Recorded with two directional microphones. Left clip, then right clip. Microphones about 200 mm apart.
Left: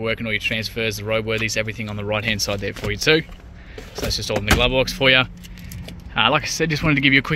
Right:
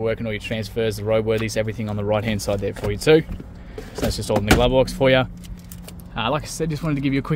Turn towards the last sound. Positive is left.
turn(degrees=0)  # may be behind; listen again after turning